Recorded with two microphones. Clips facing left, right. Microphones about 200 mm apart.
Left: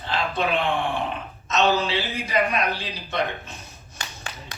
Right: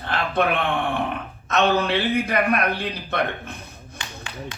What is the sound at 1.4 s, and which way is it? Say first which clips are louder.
A man's voice: right 2 dB; 55° right (ahead or behind).